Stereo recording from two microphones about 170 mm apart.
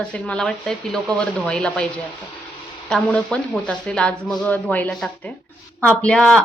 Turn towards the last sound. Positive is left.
turn(degrees=5)  # may be behind; listen again after turning